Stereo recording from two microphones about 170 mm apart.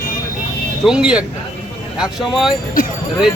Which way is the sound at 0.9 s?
5° right (ahead or behind).